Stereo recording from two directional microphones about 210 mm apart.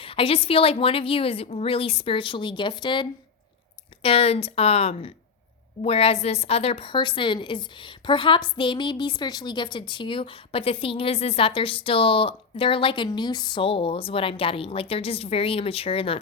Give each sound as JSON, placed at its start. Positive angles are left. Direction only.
{"t": 0.0, "sound": "a woman's voice", "side_deg": 25}